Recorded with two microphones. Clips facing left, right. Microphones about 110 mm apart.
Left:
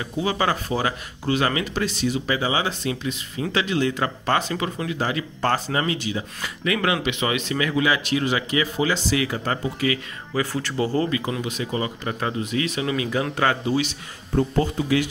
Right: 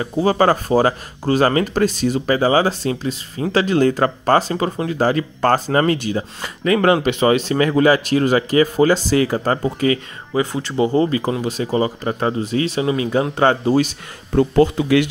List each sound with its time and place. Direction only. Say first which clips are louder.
0.0 s speech: right 8 dB; 40° right (ahead or behind)
10.3 s speech: right 5 dB; 20° right (ahead or behind)
11.1 s speech: right 5 dB; 35° right (ahead or behind)
14.3 s speech: right 7 dB; 75° right (ahead or behind)